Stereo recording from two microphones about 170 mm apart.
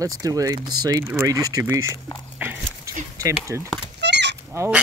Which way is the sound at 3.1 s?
20° right (ahead or behind).